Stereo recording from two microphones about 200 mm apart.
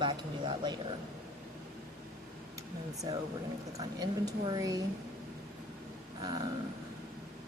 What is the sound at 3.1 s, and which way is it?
Speech, 20° right (ahead or behind).